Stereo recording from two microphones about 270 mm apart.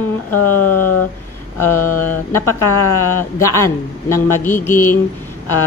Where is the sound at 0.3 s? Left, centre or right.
Left.